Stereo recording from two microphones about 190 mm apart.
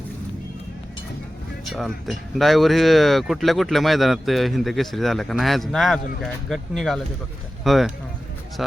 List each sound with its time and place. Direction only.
1.6 s speech: centre (ahead or behind)